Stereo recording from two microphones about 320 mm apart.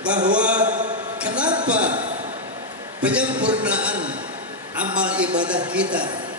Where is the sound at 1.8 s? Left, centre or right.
Right.